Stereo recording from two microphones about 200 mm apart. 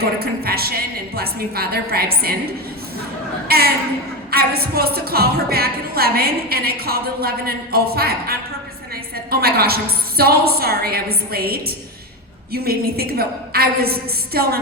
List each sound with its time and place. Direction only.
0.0 s a woman's voice: 50° right (ahead or behind)